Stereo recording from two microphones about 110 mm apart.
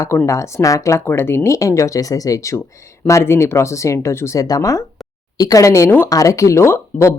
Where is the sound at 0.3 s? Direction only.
30° left (ahead or behind).